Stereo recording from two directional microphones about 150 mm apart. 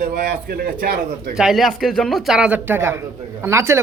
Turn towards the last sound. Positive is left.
turn(degrees=-20)  # may be behind; listen again after turning